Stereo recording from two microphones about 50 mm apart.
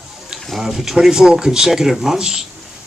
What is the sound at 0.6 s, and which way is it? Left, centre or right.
Speech, centre.